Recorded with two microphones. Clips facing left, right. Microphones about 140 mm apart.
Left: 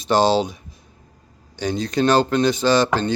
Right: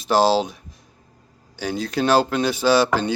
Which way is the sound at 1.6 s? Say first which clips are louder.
Left 3 dB; 5° right (ahead or behind).